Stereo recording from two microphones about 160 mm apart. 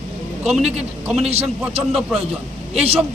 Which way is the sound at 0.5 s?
45° right (ahead or behind).